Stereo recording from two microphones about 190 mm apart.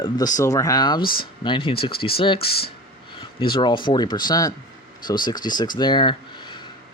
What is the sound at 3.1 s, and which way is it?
Speech, 25° left (ahead or behind).